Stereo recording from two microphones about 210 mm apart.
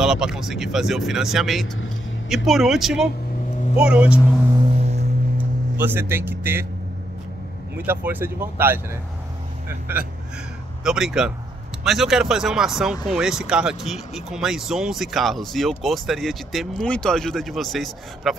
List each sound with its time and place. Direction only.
0.0 s speech: 5° right (ahead or behind)
4.7 s music: 30° right (ahead or behind)
5.8 s speech: 10° right (ahead or behind)
7.7 s speech: 10° right (ahead or behind)